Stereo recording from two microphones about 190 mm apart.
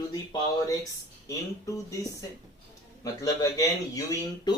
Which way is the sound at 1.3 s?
15° left (ahead or behind).